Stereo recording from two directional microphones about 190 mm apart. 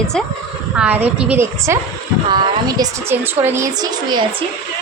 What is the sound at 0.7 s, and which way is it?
A woman's voice, 5° right (ahead or behind).